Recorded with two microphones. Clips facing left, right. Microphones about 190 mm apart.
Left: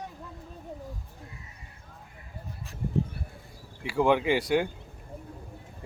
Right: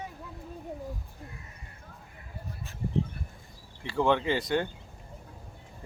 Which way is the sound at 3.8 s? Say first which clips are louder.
Left 2 dB; 10° left (ahead or behind).